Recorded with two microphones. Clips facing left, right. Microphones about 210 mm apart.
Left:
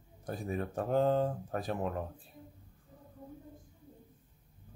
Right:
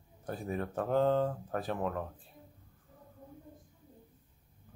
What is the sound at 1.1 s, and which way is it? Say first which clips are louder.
Speech: even; 25° left (ahead or behind).